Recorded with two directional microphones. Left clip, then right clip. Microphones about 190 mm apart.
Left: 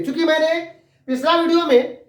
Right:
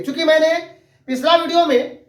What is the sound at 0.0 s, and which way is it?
Speech, 15° left (ahead or behind).